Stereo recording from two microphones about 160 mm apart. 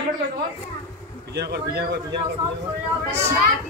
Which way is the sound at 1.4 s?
90° right.